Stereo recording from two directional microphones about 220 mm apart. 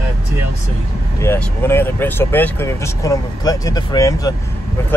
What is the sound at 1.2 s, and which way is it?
Speech, 10° left (ahead or behind).